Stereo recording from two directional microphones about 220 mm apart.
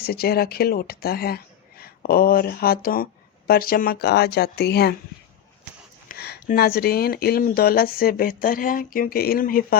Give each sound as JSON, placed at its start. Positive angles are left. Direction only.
{"t": 0.0, "sound": "speech", "side_deg": 45}
{"t": 6.1, "sound": "speech", "side_deg": 45}